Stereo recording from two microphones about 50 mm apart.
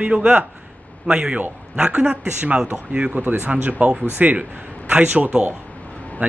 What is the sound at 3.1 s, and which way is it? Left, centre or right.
Speech, right.